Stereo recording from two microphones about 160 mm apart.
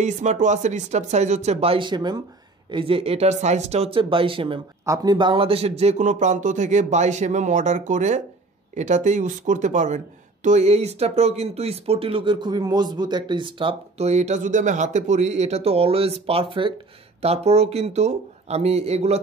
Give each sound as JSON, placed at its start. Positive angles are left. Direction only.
{"t": 0.0, "sound": "speech", "side_deg": -50}
{"t": 4.8, "sound": "speech", "side_deg": -20}